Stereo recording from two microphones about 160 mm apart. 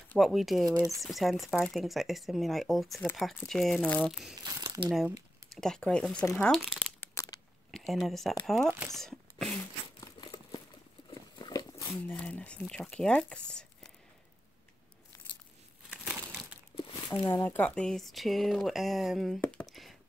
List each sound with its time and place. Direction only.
0.2 s speech: centre (ahead or behind)
4.4 s crumpling: 25° right (ahead or behind)
4.8 s speech: centre (ahead or behind)
7.0 s a sound: 20° left (ahead or behind)
7.7 s speech: centre (ahead or behind)
9.9 s crumpling: 30° left (ahead or behind)
11.1 s dog: 25° left (ahead or behind)
11.9 s speech: 5° left (ahead or behind)
15.9 s crumpling: 5° right (ahead or behind)
17.3 s speech: 15° left (ahead or behind)
19.4 s a sound: 5° left (ahead or behind)